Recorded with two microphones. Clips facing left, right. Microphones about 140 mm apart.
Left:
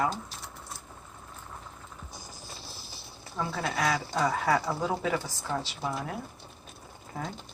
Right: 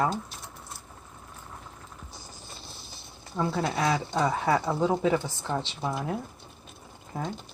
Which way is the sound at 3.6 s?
25° right (ahead or behind).